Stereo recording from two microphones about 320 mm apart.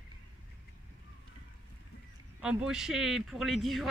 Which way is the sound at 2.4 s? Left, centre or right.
Centre.